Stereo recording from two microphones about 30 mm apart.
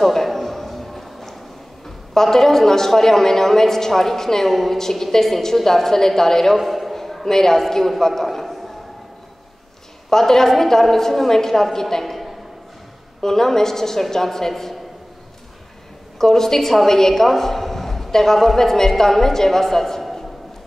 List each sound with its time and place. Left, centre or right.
0.0 s a sound: centre
2.1 s a woman's voice: centre
6.6 s a sound: centre
7.2 s a woman's voice: centre
10.0 s a woman's voice: centre
16.2 s a woman's voice: centre